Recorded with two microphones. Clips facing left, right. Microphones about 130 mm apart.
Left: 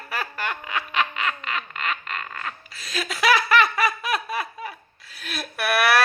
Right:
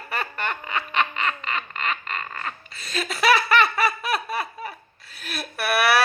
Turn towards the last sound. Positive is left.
turn(degrees=-5)  # may be behind; listen again after turning